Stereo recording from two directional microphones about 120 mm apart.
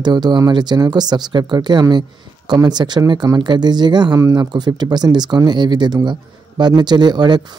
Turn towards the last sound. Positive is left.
turn(degrees=-35)  # may be behind; listen again after turning